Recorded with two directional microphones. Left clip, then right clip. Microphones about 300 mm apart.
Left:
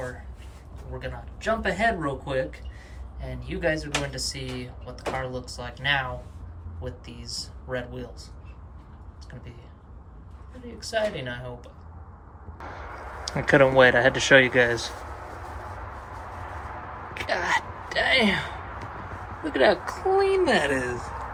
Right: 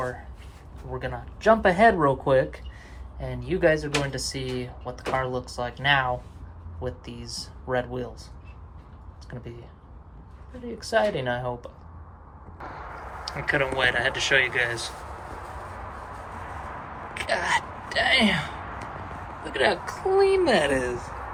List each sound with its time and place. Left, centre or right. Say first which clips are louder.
0.0 s a sound: right 4 dB; centre
0.9 s speech: right 4 dB; centre
9.3 s speech: right 6 dB; centre
10.6 s speech: right 3 dB; centre
13.2 s speech: left 6 dB; left
17.2 s speech: even; centre
19.5 s speech: left 3 dB; centre